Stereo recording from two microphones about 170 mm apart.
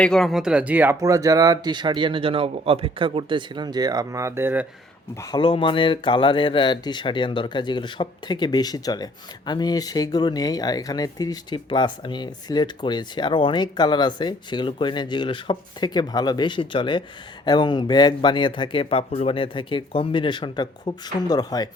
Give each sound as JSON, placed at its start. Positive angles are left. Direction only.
{"t": 0.0, "sound": "speech", "side_deg": 0}
{"t": 5.2, "sound": "speech", "side_deg": 25}